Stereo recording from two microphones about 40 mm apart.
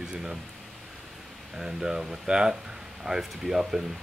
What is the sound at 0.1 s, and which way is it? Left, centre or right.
Speech, right.